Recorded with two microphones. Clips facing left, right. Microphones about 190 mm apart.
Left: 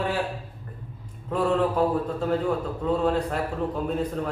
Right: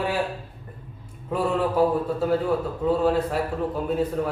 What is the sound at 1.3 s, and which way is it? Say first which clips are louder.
Speech: even; 5° right (ahead or behind).